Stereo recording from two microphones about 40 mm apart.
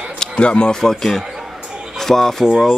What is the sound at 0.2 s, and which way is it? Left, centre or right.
Speech, left.